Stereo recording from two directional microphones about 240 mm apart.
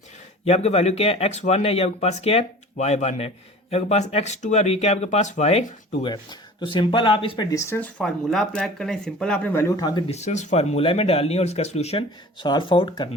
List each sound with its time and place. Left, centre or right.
0.4 s speech: left
10.1 s speech: left